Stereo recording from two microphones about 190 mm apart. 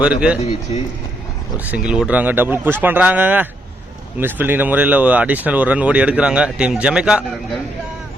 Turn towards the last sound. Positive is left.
turn(degrees=0)  # may be behind; listen again after turning